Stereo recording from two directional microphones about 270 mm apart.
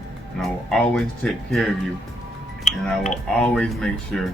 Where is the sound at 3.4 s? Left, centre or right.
Centre.